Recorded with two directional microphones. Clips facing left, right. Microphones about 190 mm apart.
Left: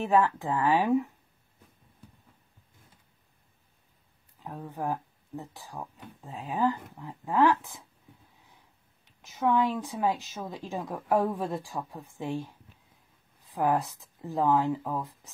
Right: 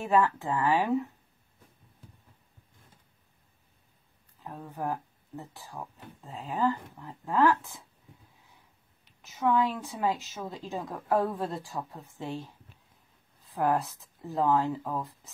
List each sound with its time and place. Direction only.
0.0 s a woman's voice: 15° left (ahead or behind)
4.4 s a woman's voice: 15° left (ahead or behind)
9.2 s a woman's voice: 15° left (ahead or behind)